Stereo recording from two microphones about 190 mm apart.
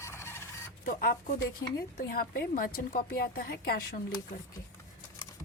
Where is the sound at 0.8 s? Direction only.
45° left (ahead or behind).